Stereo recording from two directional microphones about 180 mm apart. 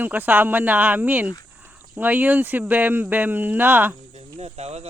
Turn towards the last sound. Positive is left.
turn(degrees=-35)  # may be behind; listen again after turning